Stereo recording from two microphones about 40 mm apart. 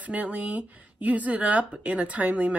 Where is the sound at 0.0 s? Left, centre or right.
Right.